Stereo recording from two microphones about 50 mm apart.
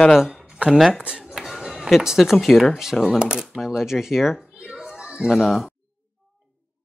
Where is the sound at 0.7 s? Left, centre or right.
Centre.